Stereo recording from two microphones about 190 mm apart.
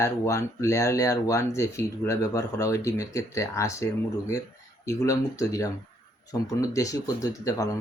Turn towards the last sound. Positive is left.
turn(degrees=15)  # may be behind; listen again after turning